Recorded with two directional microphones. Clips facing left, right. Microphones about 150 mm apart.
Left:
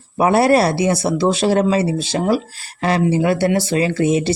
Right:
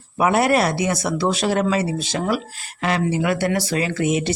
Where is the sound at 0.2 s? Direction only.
35° left (ahead or behind).